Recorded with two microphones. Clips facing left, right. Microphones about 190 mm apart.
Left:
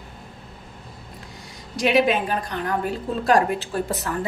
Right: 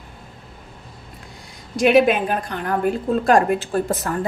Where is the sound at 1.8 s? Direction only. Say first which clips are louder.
Right 4 dB; 50° right (ahead or behind).